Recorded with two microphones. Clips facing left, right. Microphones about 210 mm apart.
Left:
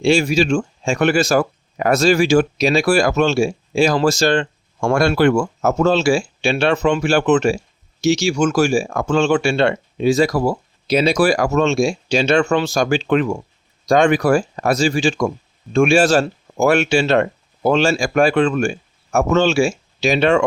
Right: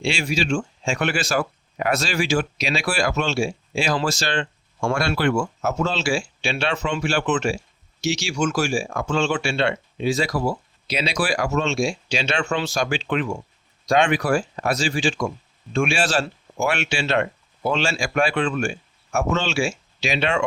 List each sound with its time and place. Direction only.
0.0 s speech: 45° left (ahead or behind)